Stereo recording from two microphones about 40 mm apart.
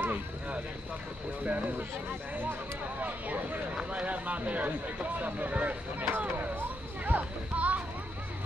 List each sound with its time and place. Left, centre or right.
0.0 s vehicle: right
1.4 s speech: right
3.0 s speech: right
5.9 s a sound: right
7.1 s children playing: right